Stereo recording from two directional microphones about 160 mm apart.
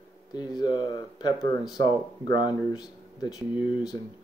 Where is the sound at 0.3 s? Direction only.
25° left (ahead or behind).